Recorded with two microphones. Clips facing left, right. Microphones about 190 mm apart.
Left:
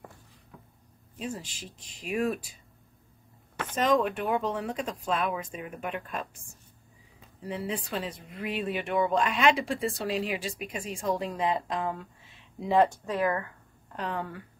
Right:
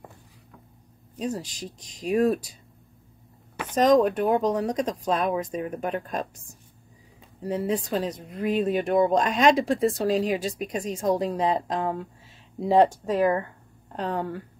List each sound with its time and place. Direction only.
1.1 s speech: 40° right (ahead or behind)
3.7 s speech: 40° right (ahead or behind)
7.4 s speech: 40° right (ahead or behind)